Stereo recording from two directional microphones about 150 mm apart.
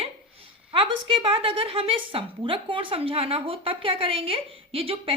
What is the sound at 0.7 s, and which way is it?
A woman's voice, 35° right (ahead or behind).